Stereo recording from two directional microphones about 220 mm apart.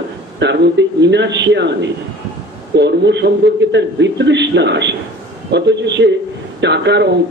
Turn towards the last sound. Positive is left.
turn(degrees=-50)  # may be behind; listen again after turning